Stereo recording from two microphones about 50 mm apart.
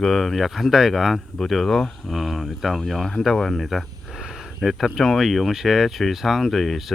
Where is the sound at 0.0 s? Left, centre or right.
Centre.